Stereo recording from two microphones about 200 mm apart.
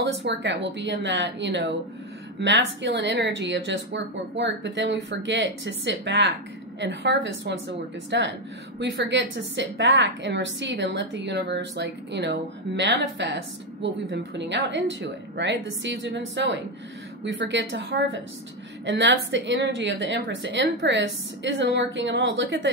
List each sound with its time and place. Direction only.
0.0 s a woman's voice: 60° right (ahead or behind)